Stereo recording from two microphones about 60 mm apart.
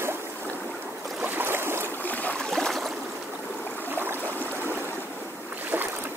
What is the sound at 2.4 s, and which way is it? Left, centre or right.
Stream, centre.